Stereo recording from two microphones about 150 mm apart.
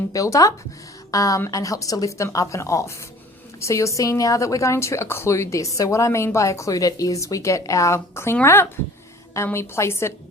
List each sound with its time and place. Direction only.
0.1 s a woman's voice: 20° left (ahead or behind)